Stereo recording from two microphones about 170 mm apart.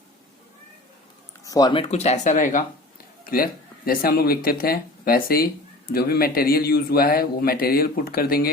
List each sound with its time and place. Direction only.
1.5 s a man's voice: 25° left (ahead or behind); by 8.4 s 60° left (ahead or behind)